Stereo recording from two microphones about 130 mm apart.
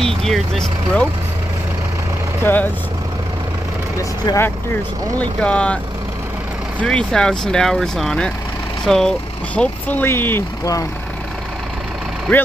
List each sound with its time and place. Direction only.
0.0 s speech: 5° left (ahead or behind)
2.4 s speech: 15° left (ahead or behind)
5.2 s speech: 10° left (ahead or behind)
6.8 s speech: 10° left (ahead or behind); by 10.9 s 25° left (ahead or behind)
12.3 s speech: 5° left (ahead or behind)